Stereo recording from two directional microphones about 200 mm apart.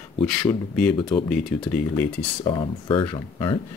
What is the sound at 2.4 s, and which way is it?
Speech, 25° left (ahead or behind).